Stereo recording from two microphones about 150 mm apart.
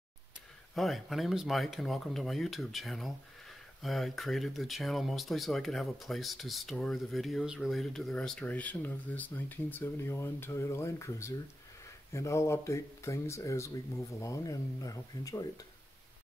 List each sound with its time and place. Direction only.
0.7 s speech: centre (ahead or behind); by 15.6 s 25° left (ahead or behind)